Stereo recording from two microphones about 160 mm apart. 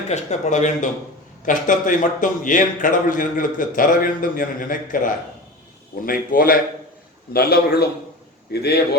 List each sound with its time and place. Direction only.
0.1 s a man's voice: 45° left (ahead or behind); by 6.6 s 65° left (ahead or behind)
7.3 s a man's voice: 75° left (ahead or behind)